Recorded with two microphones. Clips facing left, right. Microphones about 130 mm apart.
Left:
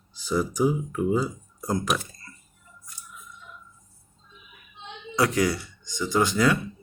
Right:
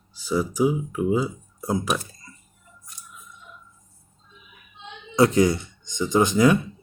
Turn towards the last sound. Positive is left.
turn(degrees=-20)  # may be behind; listen again after turning